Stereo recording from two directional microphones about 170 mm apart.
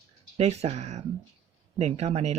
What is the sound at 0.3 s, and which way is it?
Speech, 40° right (ahead or behind).